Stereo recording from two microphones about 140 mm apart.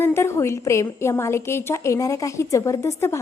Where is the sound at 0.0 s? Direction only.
20° left (ahead or behind).